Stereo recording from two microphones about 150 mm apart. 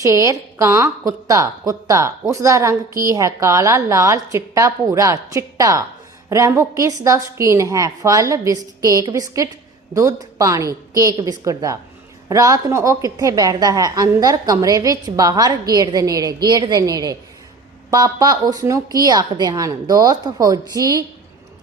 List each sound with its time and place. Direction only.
0.0 s a woman's voice: 20° right (ahead or behind)